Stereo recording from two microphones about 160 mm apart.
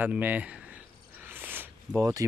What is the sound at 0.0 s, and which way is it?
Speech, 10° right (ahead or behind).